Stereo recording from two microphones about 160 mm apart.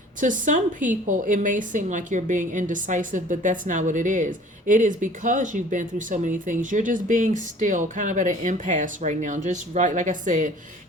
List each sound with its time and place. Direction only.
0.2 s a woman's voice: 55° right (ahead or behind)